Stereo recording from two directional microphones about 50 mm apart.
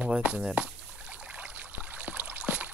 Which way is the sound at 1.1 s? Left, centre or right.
Right.